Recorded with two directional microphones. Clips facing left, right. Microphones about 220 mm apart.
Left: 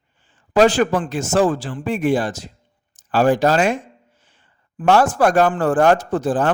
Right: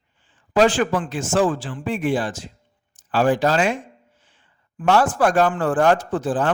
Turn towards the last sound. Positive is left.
turn(degrees=40)  # may be behind; listen again after turning